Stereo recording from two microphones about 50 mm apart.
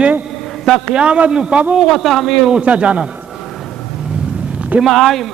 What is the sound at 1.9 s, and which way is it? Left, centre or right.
Speech, centre.